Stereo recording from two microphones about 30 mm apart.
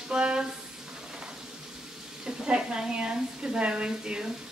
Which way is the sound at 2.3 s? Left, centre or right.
Right.